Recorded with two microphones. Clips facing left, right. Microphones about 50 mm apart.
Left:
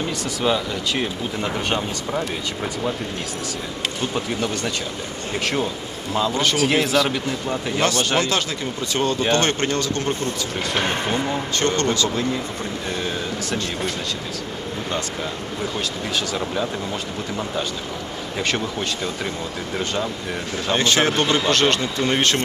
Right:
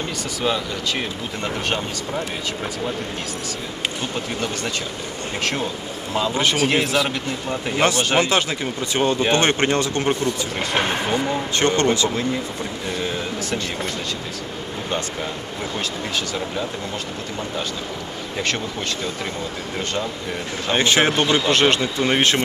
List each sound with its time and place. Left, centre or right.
0.4 s speech: centre
4.1 s speech: centre
6.1 s speech: centre
7.8 s speech: centre
11.5 s speech: centre
18.3 s speech: centre
20.7 s speech: centre